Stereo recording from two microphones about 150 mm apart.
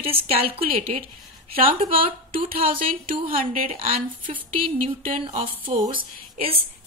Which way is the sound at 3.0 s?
65° right (ahead or behind).